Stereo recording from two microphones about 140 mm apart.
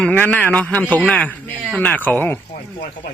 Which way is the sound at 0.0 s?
10° left (ahead or behind).